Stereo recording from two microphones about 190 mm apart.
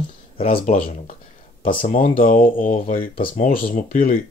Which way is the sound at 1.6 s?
45° left (ahead or behind).